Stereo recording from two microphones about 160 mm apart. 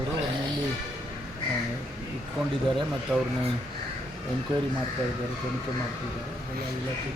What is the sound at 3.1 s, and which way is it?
Speech, 5° right (ahead or behind).